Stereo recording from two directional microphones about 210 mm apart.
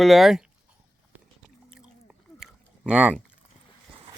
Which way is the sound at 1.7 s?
5° right (ahead or behind).